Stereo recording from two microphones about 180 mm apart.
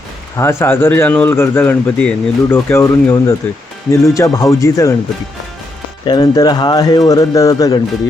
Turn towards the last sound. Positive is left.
turn(degrees=20)  # may be behind; listen again after turning